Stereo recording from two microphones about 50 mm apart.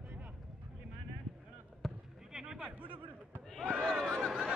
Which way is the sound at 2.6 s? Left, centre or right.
Right.